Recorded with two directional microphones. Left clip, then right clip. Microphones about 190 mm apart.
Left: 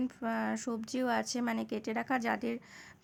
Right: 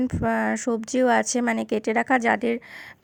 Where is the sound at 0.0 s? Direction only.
35° right (ahead or behind).